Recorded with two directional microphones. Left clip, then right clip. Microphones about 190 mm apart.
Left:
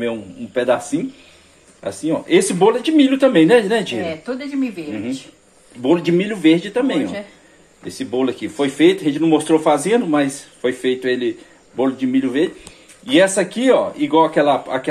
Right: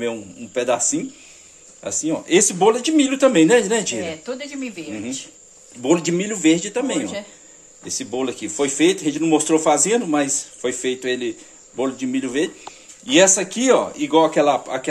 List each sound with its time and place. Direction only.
0.0 s speech: 5° right (ahead or behind)
4.0 s speech: 35° right (ahead or behind)
5.8 s speech: 5° right (ahead or behind)